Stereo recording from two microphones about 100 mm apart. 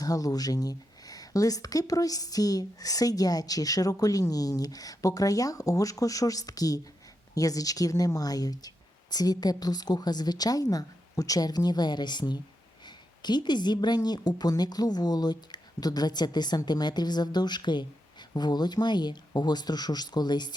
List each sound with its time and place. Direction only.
0.0 s a woman's voice: 40° left (ahead or behind)